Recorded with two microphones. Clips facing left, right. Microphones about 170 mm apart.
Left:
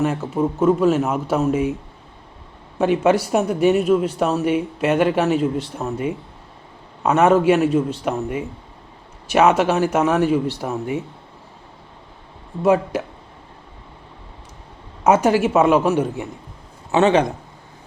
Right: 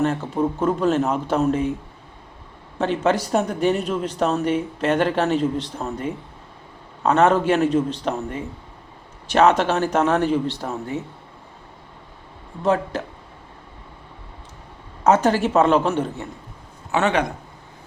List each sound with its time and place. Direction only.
0.0 s speech: 5° left (ahead or behind)
2.7 s speech: 10° left (ahead or behind)
12.6 s speech: 10° left (ahead or behind)
15.0 s speech: 10° left (ahead or behind)
16.9 s speech: 20° left (ahead or behind)